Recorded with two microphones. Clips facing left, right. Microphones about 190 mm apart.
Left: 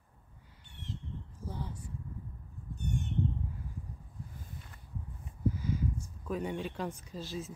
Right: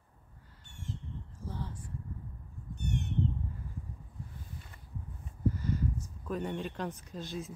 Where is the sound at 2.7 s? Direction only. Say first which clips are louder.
Right 1 dB; 70° right (ahead or behind).